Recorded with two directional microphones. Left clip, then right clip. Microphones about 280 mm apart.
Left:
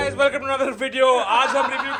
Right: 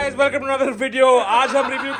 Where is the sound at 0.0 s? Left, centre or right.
Centre.